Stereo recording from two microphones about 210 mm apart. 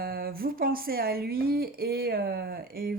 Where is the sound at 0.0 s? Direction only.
45° right (ahead or behind).